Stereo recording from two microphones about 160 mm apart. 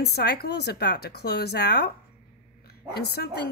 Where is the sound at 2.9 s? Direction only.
80° left.